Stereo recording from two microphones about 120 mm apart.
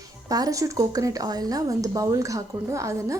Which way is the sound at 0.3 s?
30° right (ahead or behind).